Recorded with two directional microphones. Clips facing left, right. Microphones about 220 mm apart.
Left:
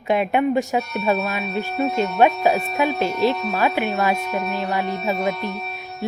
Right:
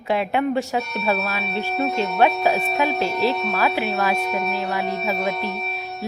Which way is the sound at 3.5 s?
20° left (ahead or behind).